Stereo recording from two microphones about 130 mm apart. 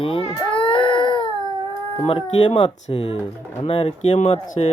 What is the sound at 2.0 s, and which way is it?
Speech, 45° left (ahead or behind).